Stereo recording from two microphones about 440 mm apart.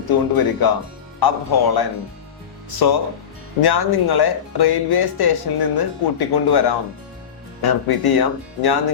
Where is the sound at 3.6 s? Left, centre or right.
Left.